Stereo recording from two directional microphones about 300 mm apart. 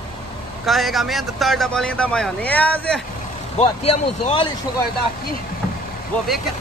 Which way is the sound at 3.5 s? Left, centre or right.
Centre.